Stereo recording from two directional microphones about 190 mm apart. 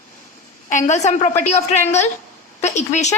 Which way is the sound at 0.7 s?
40° left (ahead or behind).